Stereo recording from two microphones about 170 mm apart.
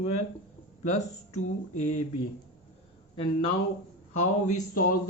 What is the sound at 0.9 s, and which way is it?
Speech, 40° left (ahead or behind).